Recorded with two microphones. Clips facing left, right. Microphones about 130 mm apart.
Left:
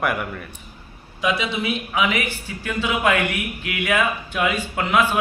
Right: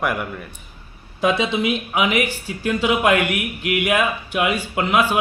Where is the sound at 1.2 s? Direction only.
35° right (ahead or behind).